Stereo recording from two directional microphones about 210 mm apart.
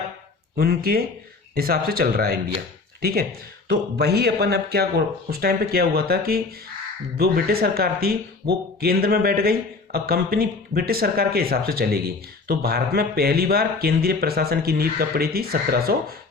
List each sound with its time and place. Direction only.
0.5 s speech: 45° right (ahead or behind)